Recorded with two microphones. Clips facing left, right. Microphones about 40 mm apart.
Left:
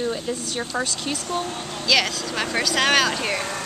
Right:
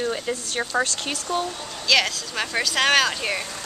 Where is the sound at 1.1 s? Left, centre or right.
Right.